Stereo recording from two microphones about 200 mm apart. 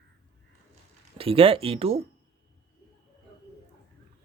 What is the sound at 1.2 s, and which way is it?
Speech, 25° right (ahead or behind).